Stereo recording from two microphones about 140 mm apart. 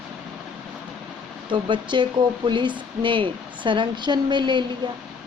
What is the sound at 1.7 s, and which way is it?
Speech, 35° right (ahead or behind).